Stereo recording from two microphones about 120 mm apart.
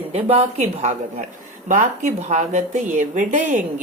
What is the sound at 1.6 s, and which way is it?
Speech, 90° right.